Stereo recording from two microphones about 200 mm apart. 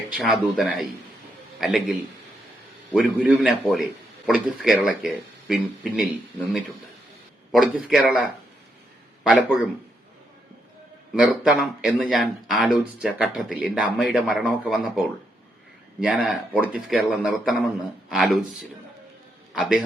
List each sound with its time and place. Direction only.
0.1 s speech: 5° right (ahead or behind)
7.5 s speech: centre (ahead or behind)
9.2 s speech: 5° right (ahead or behind)
11.1 s speech: 5° right (ahead or behind)
19.5 s speech: centre (ahead or behind)